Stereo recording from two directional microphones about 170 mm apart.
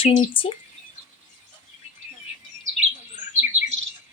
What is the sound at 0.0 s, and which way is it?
Speech, 30° left (ahead or behind).